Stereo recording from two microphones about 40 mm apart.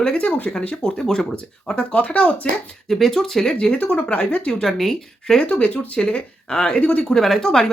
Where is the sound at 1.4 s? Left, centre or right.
Left.